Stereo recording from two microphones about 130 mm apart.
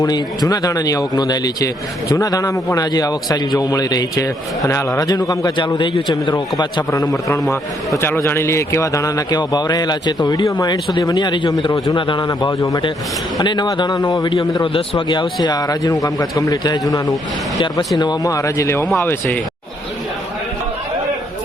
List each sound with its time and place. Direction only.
0.0 s a man's voice: 30° left (ahead or behind)
7.9 s a man's voice: 20° left (ahead or behind)